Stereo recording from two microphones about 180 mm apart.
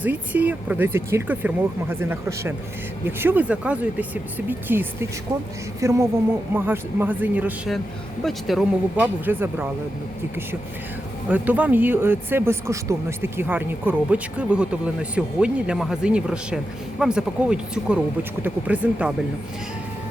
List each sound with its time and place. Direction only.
0.0 s speech: 10° right (ahead or behind)
11.3 s speech: 10° right (ahead or behind)